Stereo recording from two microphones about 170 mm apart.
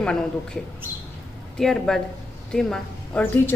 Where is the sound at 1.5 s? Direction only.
5° left (ahead or behind).